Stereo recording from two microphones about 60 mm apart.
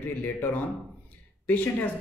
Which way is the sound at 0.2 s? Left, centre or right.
Left.